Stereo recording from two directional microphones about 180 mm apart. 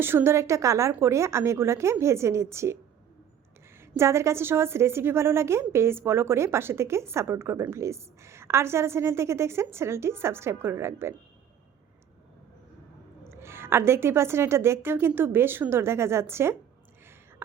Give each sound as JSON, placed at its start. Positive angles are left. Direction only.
{"t": 0.0, "sound": "a woman's voice", "side_deg": -10}
{"t": 3.8, "sound": "a woman's voice", "side_deg": -15}
{"t": 13.2, "sound": "a woman's voice", "side_deg": -15}